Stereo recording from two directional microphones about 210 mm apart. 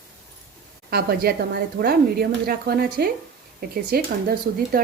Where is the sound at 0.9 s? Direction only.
45° right (ahead or behind).